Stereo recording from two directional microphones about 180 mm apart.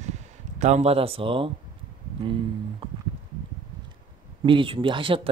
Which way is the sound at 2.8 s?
30° right (ahead or behind).